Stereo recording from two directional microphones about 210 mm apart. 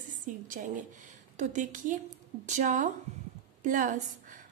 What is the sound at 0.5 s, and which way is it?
A woman's voice, 40° right (ahead or behind).